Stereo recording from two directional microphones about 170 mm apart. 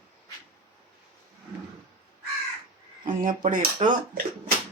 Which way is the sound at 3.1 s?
55° right (ahead or behind).